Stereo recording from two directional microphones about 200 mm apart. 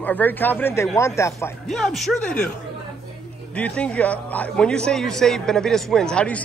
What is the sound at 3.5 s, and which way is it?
A man's voice, 5° left (ahead or behind).